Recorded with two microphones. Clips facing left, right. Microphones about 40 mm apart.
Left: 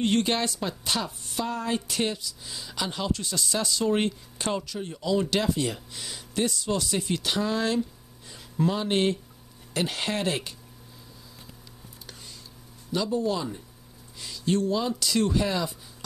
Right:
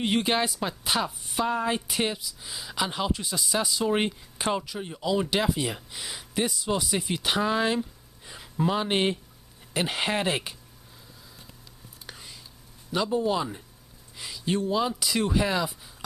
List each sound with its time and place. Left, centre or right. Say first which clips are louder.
0.0 s a woman's voice: even; centre
12.1 s whispering: right 3 dB; centre
12.9 s a woman's voice: right 1 dB; right